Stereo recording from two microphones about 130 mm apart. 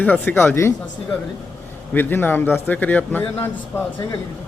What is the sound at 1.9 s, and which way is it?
Speech, 15° left (ahead or behind).